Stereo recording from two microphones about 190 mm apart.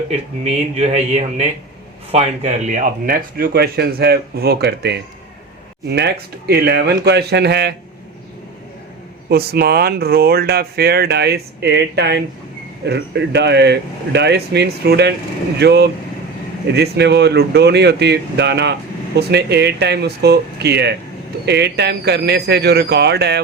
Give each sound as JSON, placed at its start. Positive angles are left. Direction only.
{"t": 0.4, "sound": "speech", "side_deg": -35}
{"t": 9.3, "sound": "speech", "side_deg": -55}